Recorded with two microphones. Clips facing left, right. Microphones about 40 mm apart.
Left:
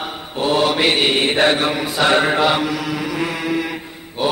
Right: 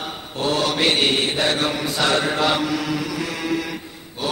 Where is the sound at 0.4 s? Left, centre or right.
Left.